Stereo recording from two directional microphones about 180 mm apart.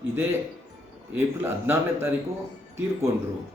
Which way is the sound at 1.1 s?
10° right (ahead or behind).